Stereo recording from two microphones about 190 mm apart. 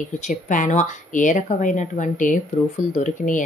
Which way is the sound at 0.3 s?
40° left (ahead or behind).